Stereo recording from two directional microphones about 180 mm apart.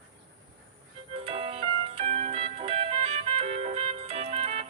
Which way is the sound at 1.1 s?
30° right (ahead or behind).